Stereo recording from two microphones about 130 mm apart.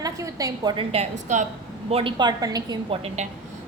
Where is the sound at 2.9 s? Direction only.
50° right (ahead or behind).